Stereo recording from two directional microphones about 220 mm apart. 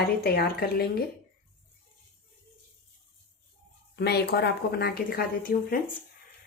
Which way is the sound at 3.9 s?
50° left (ahead or behind).